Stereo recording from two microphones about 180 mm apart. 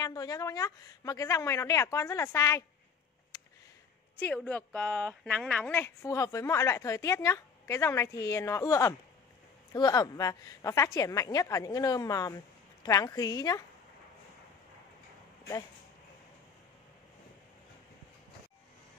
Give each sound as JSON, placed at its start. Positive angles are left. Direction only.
{"t": 0.0, "sound": "a woman's voice", "side_deg": 20}
{"t": 3.3, "sound": "a sound", "side_deg": 20}
{"t": 4.2, "sound": "a woman's voice", "side_deg": 5}